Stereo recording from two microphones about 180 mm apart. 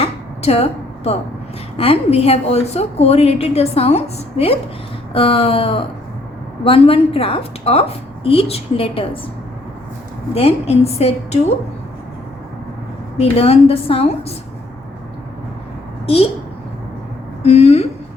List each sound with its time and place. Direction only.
0.0 s a sound: 35° left (ahead or behind)
1.7 s a woman's voice: 30° left (ahead or behind)
10.3 s a woman's voice: 35° left (ahead or behind)
13.1 s a woman's voice: 35° left (ahead or behind)
16.0 s a woman's voice: 30° left (ahead or behind)
17.4 s a woman's voice: 35° left (ahead or behind)